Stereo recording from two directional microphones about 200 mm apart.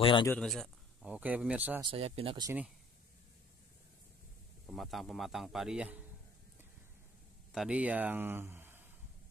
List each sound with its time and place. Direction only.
0.0 s a man's voice: 25° left (ahead or behind)
0.3 s speech: centre (ahead or behind)
1.8 s speech: 30° right (ahead or behind)
4.6 s speech: centre (ahead or behind)
7.5 s speech: 5° right (ahead or behind)